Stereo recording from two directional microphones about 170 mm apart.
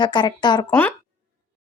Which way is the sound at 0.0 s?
25° left (ahead or behind).